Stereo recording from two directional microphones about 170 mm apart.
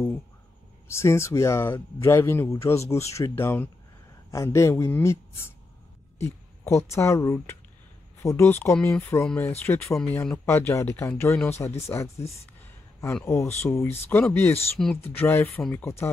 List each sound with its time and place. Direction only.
0.8 s speech: 15° left (ahead or behind)
13.2 s speech: 20° left (ahead or behind)